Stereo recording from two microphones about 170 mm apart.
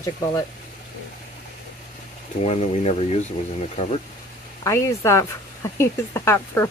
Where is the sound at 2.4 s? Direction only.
40° left (ahead or behind).